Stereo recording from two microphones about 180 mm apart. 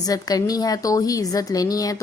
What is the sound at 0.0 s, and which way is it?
A woman's voice, 20° left (ahead or behind).